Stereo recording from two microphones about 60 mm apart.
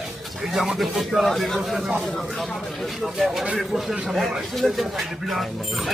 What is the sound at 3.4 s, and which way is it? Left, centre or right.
Speech, centre.